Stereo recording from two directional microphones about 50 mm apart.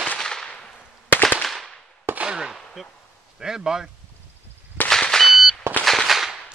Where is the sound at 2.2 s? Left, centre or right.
Centre.